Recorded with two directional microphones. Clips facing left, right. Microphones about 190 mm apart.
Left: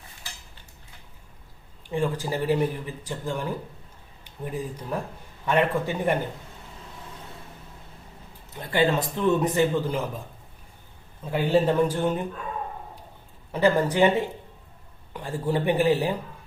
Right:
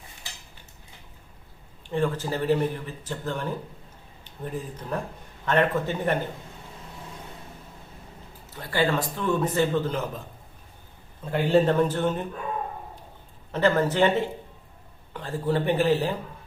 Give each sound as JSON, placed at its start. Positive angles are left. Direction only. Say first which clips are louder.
{"t": 1.9, "sound": "speech", "louder": "even", "side_deg": 10}
{"t": 8.5, "sound": "a man's voice", "louder": "left 2 dB", "side_deg": 20}
{"t": 11.3, "sound": "speech", "louder": "right 1 dB", "side_deg": 10}
{"t": 13.5, "sound": "speech", "louder": "left 1 dB", "side_deg": 10}